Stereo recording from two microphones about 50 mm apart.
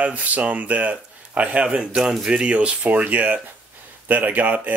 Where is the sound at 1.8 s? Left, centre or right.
Centre.